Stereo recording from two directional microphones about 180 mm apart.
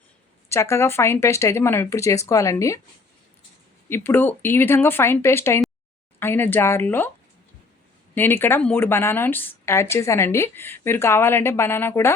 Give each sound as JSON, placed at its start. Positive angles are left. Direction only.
{"t": 0.4, "sound": "speech", "side_deg": 15}
{"t": 3.8, "sound": "speech", "side_deg": 10}
{"t": 8.1, "sound": "speech", "side_deg": 10}